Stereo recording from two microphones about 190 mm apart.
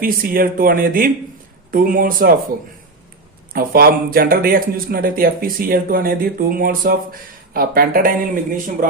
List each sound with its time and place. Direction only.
0.0 s speech: 50° right (ahead or behind)
3.5 s speech: 50° right (ahead or behind)